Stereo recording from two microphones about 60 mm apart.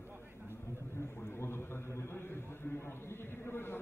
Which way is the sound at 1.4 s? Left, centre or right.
Left.